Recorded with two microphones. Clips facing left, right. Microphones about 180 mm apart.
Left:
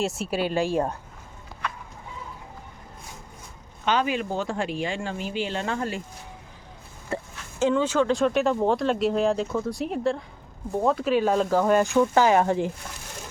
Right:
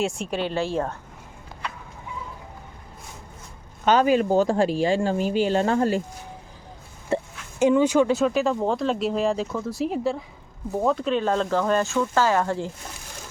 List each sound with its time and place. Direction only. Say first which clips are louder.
0.0 s speech: even; 5° left (ahead or behind)
3.8 s speech: right 6 dB; 40° right (ahead or behind)
7.1 s a sound: right 6 dB; 25° right (ahead or behind)
7.6 s speech: right 4 dB; 15° right (ahead or behind); by 12.7 s 15° left (ahead or behind)